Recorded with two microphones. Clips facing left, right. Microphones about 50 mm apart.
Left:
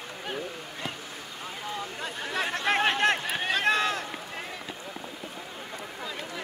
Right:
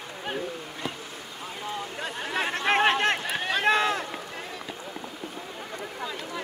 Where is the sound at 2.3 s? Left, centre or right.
Right.